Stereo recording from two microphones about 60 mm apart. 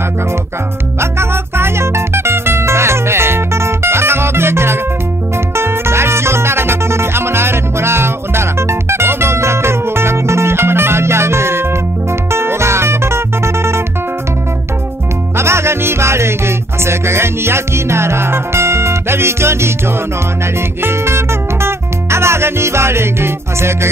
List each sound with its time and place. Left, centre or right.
1.1 s music: right
15.3 s music: right
20.8 s music: right